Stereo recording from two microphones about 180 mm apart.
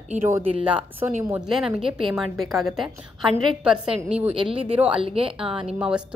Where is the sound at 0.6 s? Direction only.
10° right (ahead or behind).